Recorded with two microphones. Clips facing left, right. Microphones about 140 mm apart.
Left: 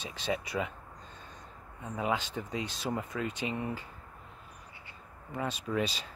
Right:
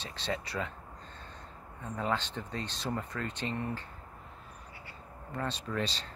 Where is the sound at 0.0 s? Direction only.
15° left (ahead or behind).